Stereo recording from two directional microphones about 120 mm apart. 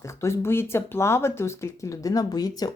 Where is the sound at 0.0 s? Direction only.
25° left (ahead or behind).